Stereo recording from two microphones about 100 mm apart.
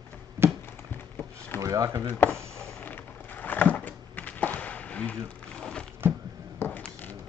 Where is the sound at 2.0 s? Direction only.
20° left (ahead or behind).